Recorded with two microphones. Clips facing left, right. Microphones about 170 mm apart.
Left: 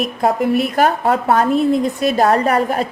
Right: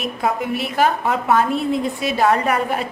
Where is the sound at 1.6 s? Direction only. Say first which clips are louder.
Left 6 dB; centre (ahead or behind).